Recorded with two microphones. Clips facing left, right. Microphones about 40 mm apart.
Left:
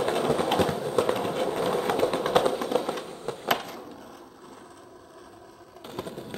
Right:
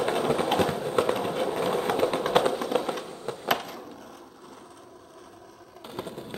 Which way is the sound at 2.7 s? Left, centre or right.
Right.